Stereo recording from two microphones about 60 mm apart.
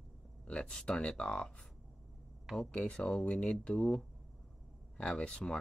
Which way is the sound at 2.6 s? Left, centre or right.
Centre.